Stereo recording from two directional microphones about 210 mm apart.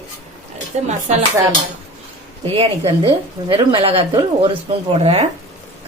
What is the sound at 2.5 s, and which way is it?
Speech, 25° right (ahead or behind).